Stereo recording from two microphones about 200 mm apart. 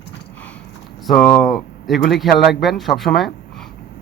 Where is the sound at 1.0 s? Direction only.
Centre (ahead or behind).